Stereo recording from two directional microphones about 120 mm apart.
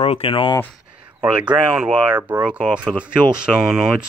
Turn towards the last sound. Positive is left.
turn(degrees=-5)  # may be behind; listen again after turning